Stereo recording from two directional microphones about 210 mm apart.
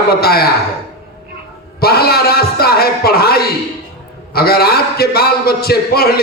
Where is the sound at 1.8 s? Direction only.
50° left (ahead or behind).